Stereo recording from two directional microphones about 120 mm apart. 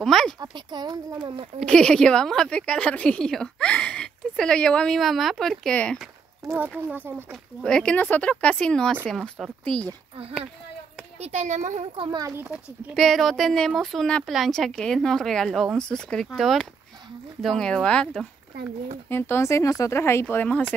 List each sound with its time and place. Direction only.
0.0 s a sound: 5° left (ahead or behind)
0.4 s speech: 35° right (ahead or behind)
1.7 s a woman's voice: 5° left (ahead or behind)
6.4 s speech: 25° right (ahead or behind)
7.6 s a woman's voice: 5° left (ahead or behind)
11.1 s a child's voice: 75° right (ahead or behind)
12.2 s a child's voice: 25° right (ahead or behind)
12.9 s a woman's voice: centre (ahead or behind)
19.0 s speech: 20° left (ahead or behind)